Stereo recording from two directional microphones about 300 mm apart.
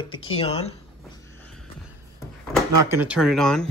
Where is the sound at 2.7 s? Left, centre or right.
Right.